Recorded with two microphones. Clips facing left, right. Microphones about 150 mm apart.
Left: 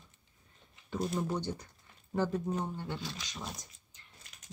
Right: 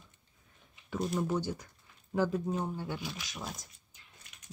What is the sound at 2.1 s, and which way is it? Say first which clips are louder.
Speech: right 1 dB; 10° right (ahead or behind).